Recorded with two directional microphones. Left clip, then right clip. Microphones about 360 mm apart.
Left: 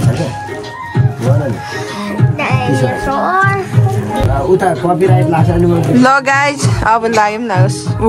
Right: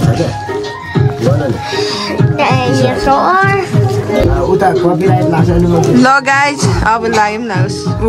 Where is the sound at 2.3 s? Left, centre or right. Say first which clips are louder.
Right 4 dB; right.